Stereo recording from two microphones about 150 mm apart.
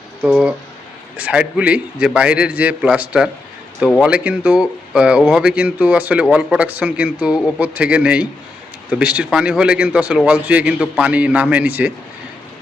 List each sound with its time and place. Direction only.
0.2 s speech: 10° right (ahead or behind)